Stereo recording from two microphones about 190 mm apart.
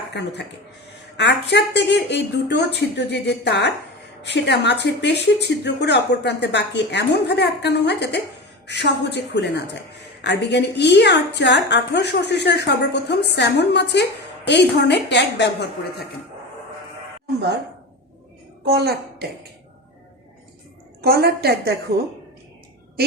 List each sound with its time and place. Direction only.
0.1 s a woman's voice: 65° left (ahead or behind)
18.6 s a woman's voice: 55° right (ahead or behind)
21.0 s a woman's voice: 55° right (ahead or behind)